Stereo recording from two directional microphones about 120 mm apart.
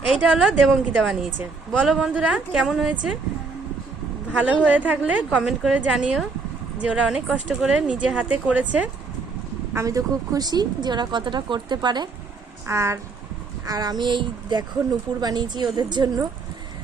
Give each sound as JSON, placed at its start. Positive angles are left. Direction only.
{"t": 0.1, "sound": "a woman's voice", "side_deg": -5}
{"t": 4.3, "sound": "a woman's voice", "side_deg": -10}
{"t": 9.7, "sound": "speech", "side_deg": -25}
{"t": 12.6, "sound": "speech", "side_deg": -25}